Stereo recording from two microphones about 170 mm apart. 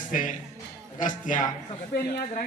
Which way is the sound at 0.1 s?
50° left (ahead or behind).